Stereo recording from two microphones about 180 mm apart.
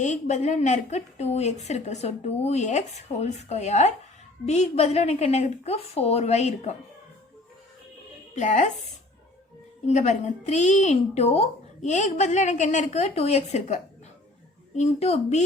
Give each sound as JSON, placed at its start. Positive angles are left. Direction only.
{"t": 0.0, "sound": "a woman's voice", "side_deg": 40}
{"t": 8.4, "sound": "a woman's voice", "side_deg": 40}
{"t": 9.8, "sound": "a woman's voice", "side_deg": 40}
{"t": 14.8, "sound": "a woman's voice", "side_deg": 35}